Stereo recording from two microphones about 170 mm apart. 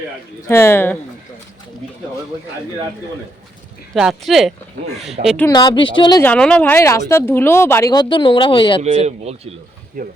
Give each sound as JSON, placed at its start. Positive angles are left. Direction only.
{"t": 0.4, "sound": "speech", "side_deg": 15}
{"t": 3.9, "sound": "speech", "side_deg": 0}
{"t": 5.5, "sound": "a woman's voice", "side_deg": 25}
{"t": 6.2, "sound": "speech", "side_deg": 5}
{"t": 8.8, "sound": "speech", "side_deg": -40}
{"t": 10.0, "sound": "speech", "side_deg": -55}